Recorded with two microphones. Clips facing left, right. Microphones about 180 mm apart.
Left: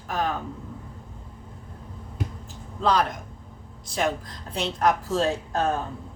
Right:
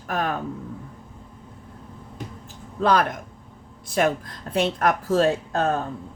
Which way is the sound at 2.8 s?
55° right (ahead or behind).